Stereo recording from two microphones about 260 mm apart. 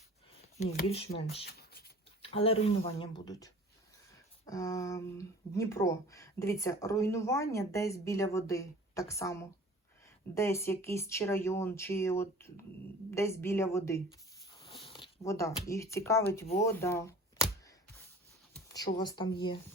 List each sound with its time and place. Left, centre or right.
0.3 s speech: left
1.5 s writing: left
2.2 s speech: left
18.9 s speech: centre